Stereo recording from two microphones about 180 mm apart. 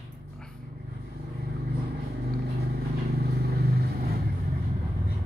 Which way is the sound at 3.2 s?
60° right (ahead or behind).